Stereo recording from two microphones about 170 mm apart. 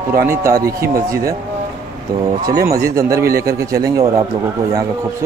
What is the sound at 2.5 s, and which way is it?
Speech, 15° right (ahead or behind).